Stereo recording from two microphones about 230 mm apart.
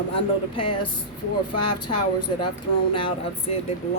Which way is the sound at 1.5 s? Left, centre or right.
Left.